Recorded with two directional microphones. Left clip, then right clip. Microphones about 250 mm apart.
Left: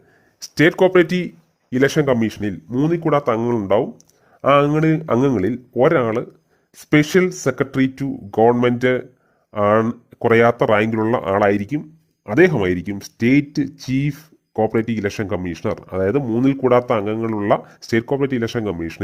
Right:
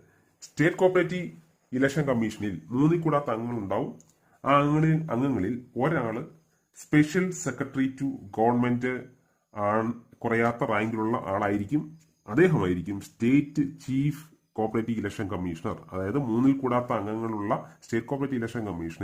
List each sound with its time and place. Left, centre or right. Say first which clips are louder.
0.5 s speech: left 9 dB; left
2.7 s speech: left 5 dB; left
3.1 s speech: left 10 dB; left